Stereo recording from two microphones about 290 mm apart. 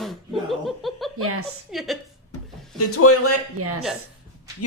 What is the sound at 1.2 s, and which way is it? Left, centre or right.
Speech, right.